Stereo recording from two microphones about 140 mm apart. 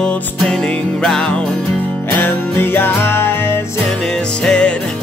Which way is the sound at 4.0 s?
5° left (ahead or behind).